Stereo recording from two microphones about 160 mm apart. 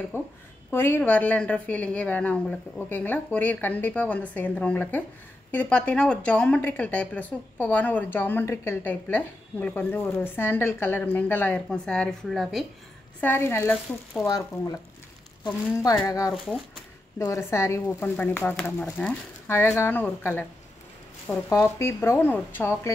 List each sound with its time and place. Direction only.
0.1 s a sound: 15° left (ahead or behind)
0.7 s speech: 15° left (ahead or behind)
13.2 s speech: 15° left (ahead or behind)
17.2 s speech: 20° left (ahead or behind)